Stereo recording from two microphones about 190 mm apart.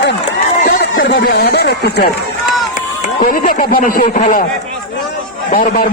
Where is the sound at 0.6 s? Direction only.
55° left (ahead or behind).